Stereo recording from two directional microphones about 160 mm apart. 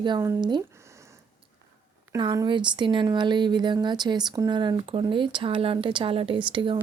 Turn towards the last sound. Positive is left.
turn(degrees=-30)  # may be behind; listen again after turning